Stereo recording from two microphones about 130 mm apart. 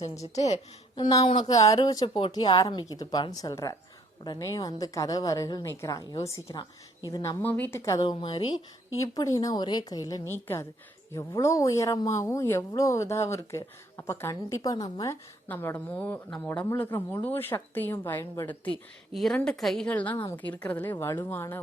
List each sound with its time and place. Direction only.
0.3 s speech: 60° left (ahead or behind)
0.9 s a woman's voice: 35° left (ahead or behind)
1.5 s a woman's voice: 25° left (ahead or behind)
7.4 s speech: 15° left (ahead or behind)
8.1 s speech: 40° left (ahead or behind)
15.1 s speech: 15° left (ahead or behind)
19.1 s a woman's voice: centre (ahead or behind); by 21.6 s 15° left (ahead or behind)